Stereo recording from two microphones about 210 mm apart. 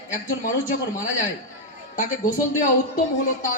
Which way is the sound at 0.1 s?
40° left (ahead or behind).